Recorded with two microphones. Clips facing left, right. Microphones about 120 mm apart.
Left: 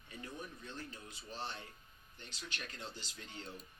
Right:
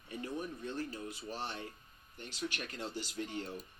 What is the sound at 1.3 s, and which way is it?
Speech, 65° right (ahead or behind).